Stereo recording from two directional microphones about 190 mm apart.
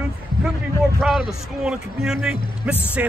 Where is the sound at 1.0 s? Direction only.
Centre (ahead or behind).